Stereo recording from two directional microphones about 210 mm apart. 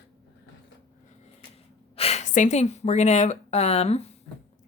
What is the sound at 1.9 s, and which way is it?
Speech, 30° left (ahead or behind).